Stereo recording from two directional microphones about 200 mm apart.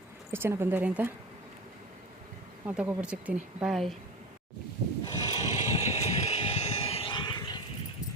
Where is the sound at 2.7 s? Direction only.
5° right (ahead or behind).